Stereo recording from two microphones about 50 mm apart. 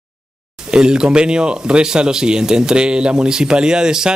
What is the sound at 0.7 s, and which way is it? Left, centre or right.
Speech, centre.